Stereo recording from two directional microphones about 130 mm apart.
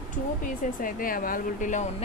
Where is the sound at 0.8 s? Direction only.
90° left.